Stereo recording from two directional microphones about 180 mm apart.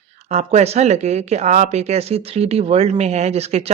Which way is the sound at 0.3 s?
40° right (ahead or behind).